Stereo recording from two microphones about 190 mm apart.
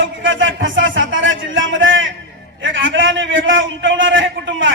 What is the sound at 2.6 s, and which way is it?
A man's voice, 85° right.